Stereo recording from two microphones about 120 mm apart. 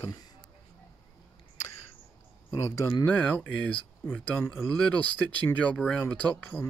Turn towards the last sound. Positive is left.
turn(degrees=15)  # may be behind; listen again after turning